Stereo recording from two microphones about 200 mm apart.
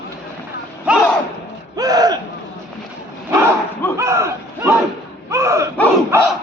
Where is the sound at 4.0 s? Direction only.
15° right (ahead or behind).